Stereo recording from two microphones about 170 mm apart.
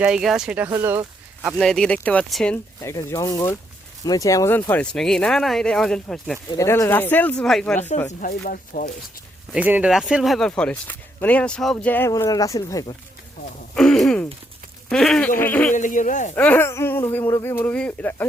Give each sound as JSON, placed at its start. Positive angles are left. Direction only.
{"t": 0.0, "sound": "speech", "side_deg": -5}
{"t": 1.5, "sound": "speech", "side_deg": 0}
{"t": 2.8, "sound": "speech", "side_deg": 20}
{"t": 4.7, "sound": "speech", "side_deg": 5}
{"t": 6.5, "sound": "speech", "side_deg": 20}
{"t": 8.2, "sound": "speech", "side_deg": 55}
{"t": 9.5, "sound": "speech", "side_deg": -10}
{"t": 13.7, "sound": "a sound", "side_deg": 5}
{"t": 14.8, "sound": "speech", "side_deg": 5}
{"t": 15.7, "sound": "speech", "side_deg": 50}
{"t": 16.3, "sound": "speech", "side_deg": 10}